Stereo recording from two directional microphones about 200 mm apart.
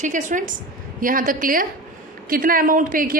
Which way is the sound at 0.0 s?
40° right (ahead or behind).